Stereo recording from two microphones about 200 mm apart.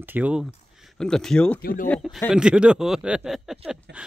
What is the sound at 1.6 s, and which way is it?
Speech, 50° left (ahead or behind).